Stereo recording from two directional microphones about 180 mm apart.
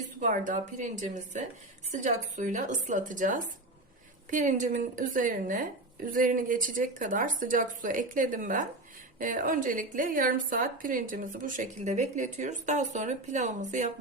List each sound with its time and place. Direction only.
0.2 s a woman's voice: 45° right (ahead or behind)